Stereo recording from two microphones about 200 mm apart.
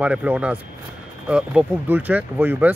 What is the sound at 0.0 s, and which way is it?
Speech, 5° right (ahead or behind).